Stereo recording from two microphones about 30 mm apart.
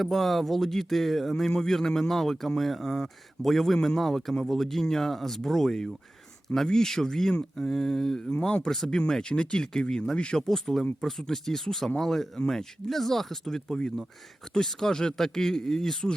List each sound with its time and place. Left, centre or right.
0.0 s a man's voice: centre
8.3 s speech: left
8.6 s a man's voice: centre
10.3 s a man's voice: centre
14.8 s a man's voice: centre